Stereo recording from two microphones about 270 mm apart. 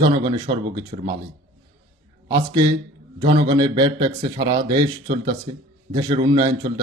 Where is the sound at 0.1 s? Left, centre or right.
Centre.